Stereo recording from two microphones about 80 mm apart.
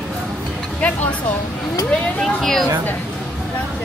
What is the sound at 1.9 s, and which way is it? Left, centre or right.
Speech, centre.